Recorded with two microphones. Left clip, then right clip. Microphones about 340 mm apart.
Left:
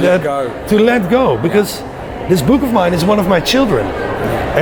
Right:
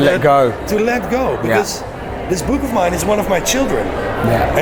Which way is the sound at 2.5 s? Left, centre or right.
Left.